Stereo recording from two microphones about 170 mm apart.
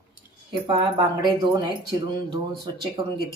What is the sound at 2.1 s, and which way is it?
Speech, 25° right (ahead or behind).